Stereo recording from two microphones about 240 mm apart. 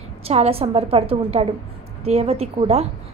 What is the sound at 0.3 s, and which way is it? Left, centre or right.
A woman's voice, right.